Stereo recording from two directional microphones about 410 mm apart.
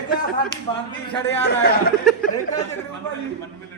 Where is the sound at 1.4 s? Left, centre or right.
Left.